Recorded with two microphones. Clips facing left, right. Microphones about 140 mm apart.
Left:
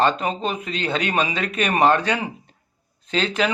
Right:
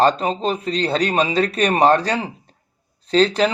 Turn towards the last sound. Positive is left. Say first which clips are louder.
# right 6 dB
turn(degrees=-35)  # may be behind; listen again after turning